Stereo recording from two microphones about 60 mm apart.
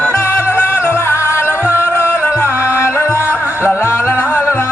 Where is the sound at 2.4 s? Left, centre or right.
Right.